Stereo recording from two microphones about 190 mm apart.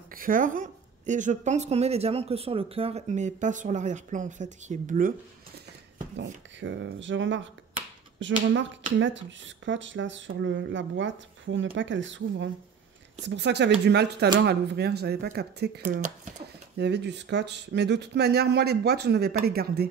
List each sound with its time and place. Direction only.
0.1 s a woman's voice: 45° right (ahead or behind)
6.1 s speech: 70° right (ahead or behind); by 16.1 s 45° right (ahead or behind)
16.7 s speech: 60° right (ahead or behind)